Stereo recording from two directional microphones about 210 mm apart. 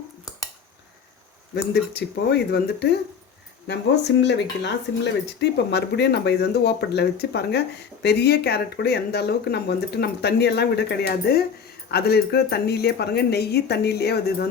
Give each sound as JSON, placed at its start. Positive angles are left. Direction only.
{"t": 1.7, "sound": "speech", "side_deg": 50}